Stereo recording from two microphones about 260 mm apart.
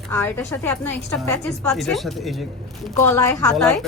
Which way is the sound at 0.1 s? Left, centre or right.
Centre.